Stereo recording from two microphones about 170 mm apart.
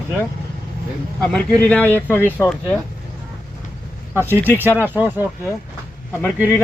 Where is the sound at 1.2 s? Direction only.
5° left (ahead or behind).